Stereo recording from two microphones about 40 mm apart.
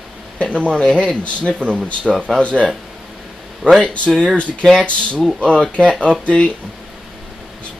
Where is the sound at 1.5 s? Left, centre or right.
Right.